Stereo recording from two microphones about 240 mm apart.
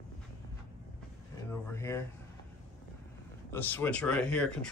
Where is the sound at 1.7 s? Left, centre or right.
Centre.